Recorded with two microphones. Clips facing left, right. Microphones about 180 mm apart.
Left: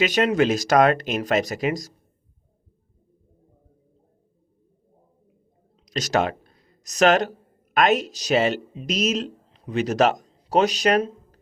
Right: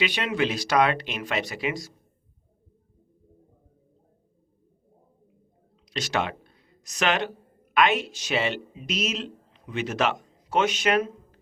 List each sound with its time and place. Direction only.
0.0 s speech: 45° left (ahead or behind)
5.8 s a man's voice: 40° left (ahead or behind)